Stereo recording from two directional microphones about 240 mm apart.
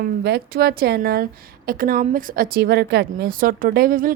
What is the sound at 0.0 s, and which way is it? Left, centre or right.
A woman's voice, right.